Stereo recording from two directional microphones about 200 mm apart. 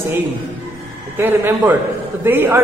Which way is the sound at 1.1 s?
10° right (ahead or behind).